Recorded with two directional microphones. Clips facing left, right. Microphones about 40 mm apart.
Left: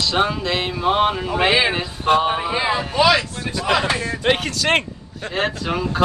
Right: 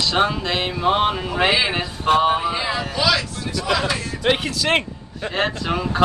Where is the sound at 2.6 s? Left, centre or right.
Left.